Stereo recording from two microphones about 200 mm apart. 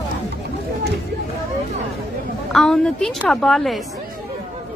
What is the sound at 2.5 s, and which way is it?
A woman's voice, centre (ahead or behind).